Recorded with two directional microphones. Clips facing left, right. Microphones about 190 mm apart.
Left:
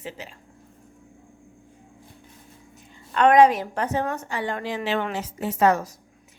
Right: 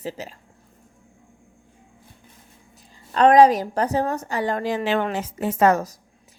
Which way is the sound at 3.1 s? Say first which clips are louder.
Right 2 dB; 35° right (ahead or behind).